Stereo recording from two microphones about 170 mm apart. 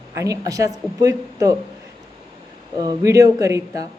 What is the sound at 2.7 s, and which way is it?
Speech, 20° right (ahead or behind).